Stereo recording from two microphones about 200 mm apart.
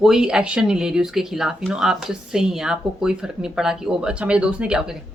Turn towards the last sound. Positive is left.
turn(degrees=-5)  # may be behind; listen again after turning